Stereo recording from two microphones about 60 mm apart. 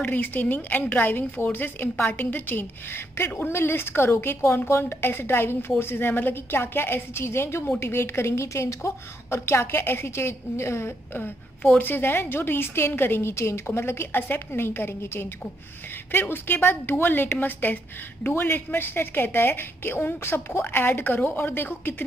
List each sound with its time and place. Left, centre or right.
0.0 s a woman's voice: left
13.3 s a woman's voice: left